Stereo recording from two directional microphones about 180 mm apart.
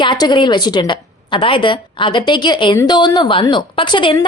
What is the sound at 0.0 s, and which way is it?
A woman's voice, 25° left (ahead or behind).